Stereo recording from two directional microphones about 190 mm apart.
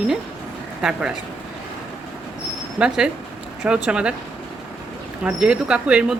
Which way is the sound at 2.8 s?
5° right (ahead or behind).